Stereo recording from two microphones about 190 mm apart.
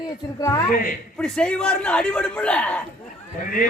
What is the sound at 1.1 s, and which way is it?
A man's voice, 5° left (ahead or behind).